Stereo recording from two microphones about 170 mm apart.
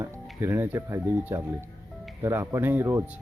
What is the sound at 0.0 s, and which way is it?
Speech, 15° right (ahead or behind).